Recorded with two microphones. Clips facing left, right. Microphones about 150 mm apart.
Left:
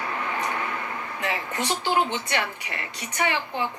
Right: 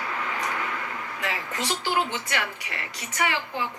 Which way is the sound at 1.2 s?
20° left (ahead or behind).